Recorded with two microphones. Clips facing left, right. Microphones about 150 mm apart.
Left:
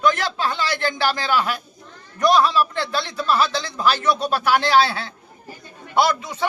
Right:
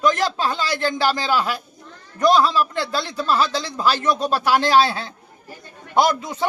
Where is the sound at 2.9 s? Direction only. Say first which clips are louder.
Even; 40° right (ahead or behind).